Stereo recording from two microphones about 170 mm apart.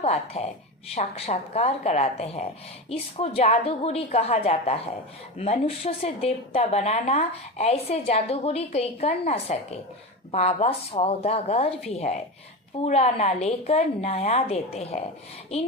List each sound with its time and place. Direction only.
0.0 s speech: 40° left (ahead or behind)